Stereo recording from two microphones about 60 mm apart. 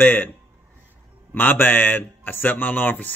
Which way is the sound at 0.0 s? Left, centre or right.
Left.